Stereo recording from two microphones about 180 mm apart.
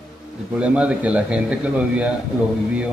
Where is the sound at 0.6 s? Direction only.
5° right (ahead or behind).